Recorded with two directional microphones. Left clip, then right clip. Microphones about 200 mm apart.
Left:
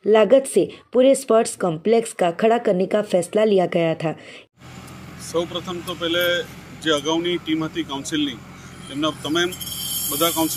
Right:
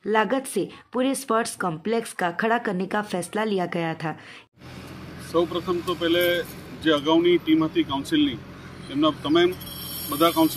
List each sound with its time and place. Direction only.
0.1 s speech: 5° left (ahead or behind)
5.3 s speech: 5° left (ahead or behind)